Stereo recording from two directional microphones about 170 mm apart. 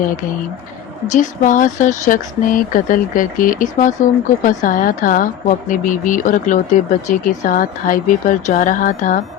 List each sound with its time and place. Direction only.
1.1 s speech: 50° left (ahead or behind)